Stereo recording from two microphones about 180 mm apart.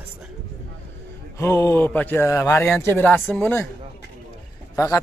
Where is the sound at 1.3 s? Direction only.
15° left (ahead or behind).